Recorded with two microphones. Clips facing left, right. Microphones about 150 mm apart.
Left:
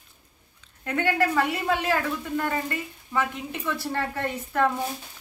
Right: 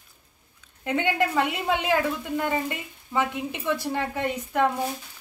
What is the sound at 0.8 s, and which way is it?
A woman's voice, 20° right (ahead or behind).